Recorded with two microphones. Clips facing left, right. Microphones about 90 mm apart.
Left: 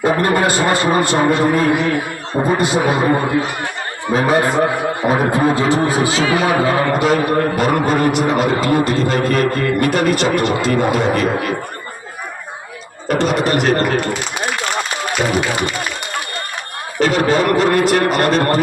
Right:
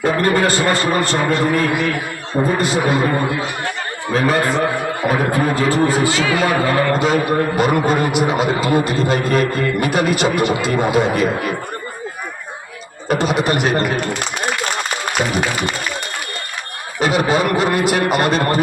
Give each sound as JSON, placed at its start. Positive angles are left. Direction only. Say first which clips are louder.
{"t": 0.0, "sound": "a man's voice", "louder": "left 1 dB", "side_deg": 15}
{"t": 7.0, "sound": "a man's voice", "louder": "left 1 dB", "side_deg": 0}
{"t": 13.1, "sound": "a man's voice", "louder": "left 1 dB", "side_deg": -5}
{"t": 17.0, "sound": "a man's voice", "louder": "left 2 dB", "side_deg": -10}